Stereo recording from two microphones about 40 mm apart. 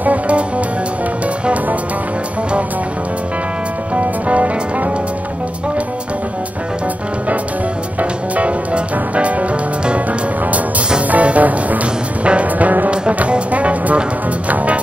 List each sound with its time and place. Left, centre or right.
0.0 s music: right
1.4 s music: right
3.9 s music: right
8.0 s music: right